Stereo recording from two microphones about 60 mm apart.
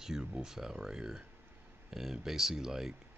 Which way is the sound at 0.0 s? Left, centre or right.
Centre.